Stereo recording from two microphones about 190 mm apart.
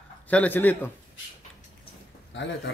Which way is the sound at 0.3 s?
10° left (ahead or behind).